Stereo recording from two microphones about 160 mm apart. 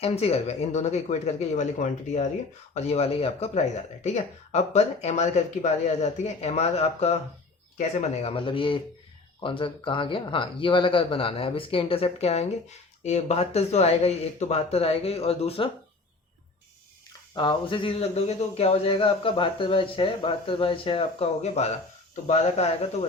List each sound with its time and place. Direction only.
0.0 s speech: 40° left (ahead or behind)
17.3 s speech: 30° left (ahead or behind)